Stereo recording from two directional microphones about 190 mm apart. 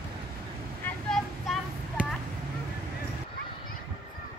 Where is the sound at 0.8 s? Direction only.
Centre (ahead or behind).